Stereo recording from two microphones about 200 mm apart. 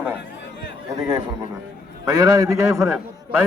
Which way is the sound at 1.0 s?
20° right (ahead or behind).